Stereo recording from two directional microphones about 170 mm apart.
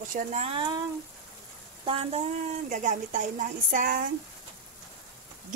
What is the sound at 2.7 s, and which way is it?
A woman's voice, 50° right (ahead or behind).